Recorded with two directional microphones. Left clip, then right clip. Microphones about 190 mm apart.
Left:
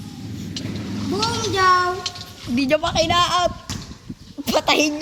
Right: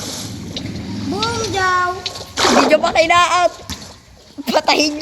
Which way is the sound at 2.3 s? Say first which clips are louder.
Right 14 dB; 55° right (ahead or behind).